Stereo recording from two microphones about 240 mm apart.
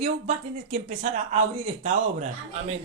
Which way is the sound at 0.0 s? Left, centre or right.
Right.